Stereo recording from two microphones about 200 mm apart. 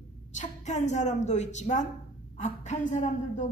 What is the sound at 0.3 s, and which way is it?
A woman's voice, 35° left (ahead or behind).